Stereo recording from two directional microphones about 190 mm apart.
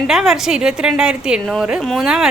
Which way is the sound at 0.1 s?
Centre (ahead or behind).